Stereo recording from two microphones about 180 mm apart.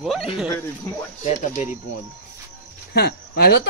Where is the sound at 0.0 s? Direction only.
Centre (ahead or behind).